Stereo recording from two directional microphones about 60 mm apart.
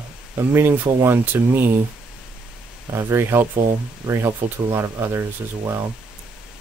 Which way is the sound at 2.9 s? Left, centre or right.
Right.